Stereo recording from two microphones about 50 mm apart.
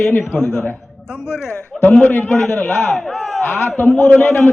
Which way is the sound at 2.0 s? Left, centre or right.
Left.